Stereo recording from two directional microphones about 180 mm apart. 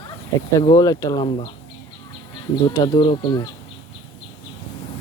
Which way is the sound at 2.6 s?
20° left (ahead or behind).